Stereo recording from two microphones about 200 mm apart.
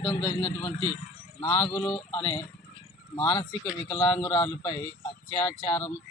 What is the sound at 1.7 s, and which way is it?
A man's voice, 10° left (ahead or behind).